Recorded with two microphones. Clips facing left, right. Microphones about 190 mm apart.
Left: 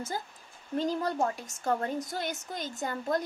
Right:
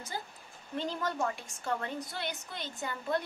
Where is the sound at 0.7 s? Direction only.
40° left (ahead or behind).